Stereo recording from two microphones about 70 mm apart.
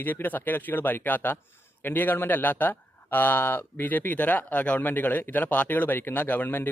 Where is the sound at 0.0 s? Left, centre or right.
Left.